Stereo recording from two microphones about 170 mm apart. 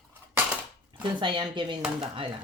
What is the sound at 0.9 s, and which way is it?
Speech, 30° right (ahead or behind).